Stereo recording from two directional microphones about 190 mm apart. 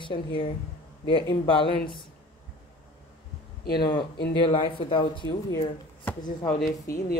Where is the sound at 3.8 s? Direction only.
25° left (ahead or behind).